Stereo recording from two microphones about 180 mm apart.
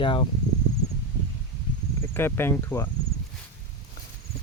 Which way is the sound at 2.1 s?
10° left (ahead or behind).